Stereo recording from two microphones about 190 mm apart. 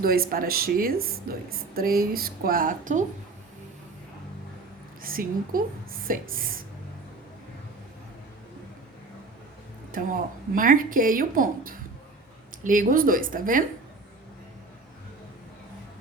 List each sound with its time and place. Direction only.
0.0 s a woman's voice: 50° right (ahead or behind)
5.0 s a woman's voice: 50° right (ahead or behind)
9.9 s a woman's voice: 45° right (ahead or behind)